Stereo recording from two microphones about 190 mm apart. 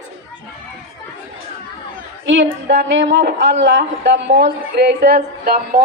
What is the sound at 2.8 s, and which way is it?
A woman's voice, 70° right (ahead or behind).